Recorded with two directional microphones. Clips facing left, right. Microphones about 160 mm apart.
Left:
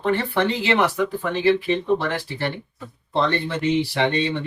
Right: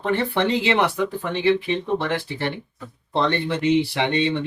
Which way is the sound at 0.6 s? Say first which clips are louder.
Even; 20° right (ahead or behind).